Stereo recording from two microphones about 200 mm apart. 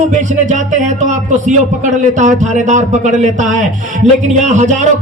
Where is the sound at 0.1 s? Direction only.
35° right (ahead or behind).